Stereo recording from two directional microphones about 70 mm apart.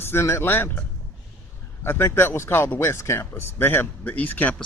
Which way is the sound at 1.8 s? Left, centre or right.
Left.